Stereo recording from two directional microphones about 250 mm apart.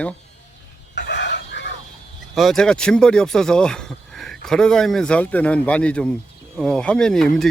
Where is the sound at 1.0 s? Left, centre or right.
Left.